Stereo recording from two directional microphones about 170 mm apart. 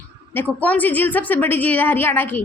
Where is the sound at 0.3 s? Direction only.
10° left (ahead or behind).